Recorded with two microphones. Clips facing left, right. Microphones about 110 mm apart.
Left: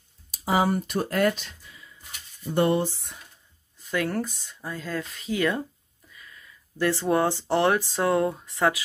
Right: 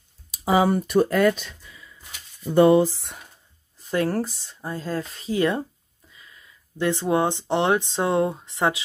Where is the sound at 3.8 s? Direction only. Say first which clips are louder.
Right 4 dB; 35° right (ahead or behind).